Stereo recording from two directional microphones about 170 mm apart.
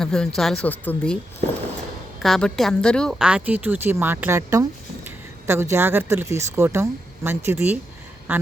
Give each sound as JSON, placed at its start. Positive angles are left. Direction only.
{"t": 0.0, "sound": "speech", "side_deg": 5}
{"t": 1.4, "sound": "a sound", "side_deg": -45}
{"t": 2.2, "sound": "a woman's voice", "side_deg": 0}